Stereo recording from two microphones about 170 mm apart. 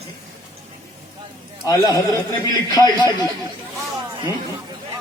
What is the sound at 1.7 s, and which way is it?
Speech, 20° left (ahead or behind).